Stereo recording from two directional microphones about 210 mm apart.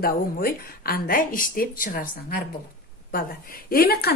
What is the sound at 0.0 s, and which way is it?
A woman's voice, 45° left (ahead or behind).